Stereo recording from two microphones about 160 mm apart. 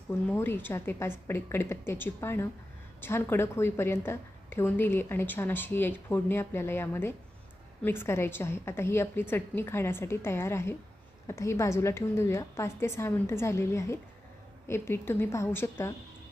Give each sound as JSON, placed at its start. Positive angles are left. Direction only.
{"t": 0.3, "sound": "a woman's voice", "side_deg": 15}